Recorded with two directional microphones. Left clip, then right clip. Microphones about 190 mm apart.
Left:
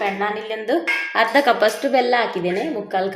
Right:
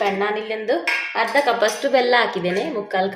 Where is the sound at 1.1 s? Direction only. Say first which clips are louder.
Left 4 dB; 25° left (ahead or behind).